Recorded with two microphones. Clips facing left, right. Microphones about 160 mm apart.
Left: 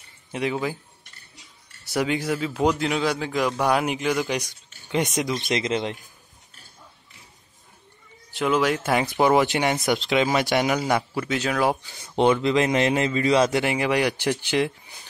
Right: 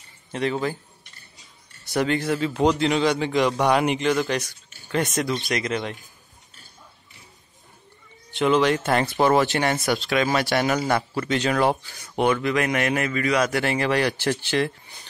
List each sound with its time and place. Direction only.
0.3 s speech: 10° left (ahead or behind)
2.0 s a man's voice: 10° left (ahead or behind)
8.4 s speech: 5° left (ahead or behind)
11.8 s a man's voice: 20° left (ahead or behind)